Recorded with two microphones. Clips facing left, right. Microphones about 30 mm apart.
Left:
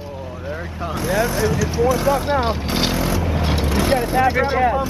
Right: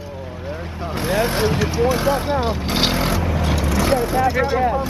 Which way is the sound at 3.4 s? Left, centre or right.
Left.